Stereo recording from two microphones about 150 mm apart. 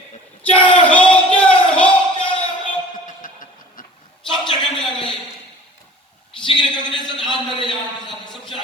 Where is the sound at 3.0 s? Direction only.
65° left (ahead or behind).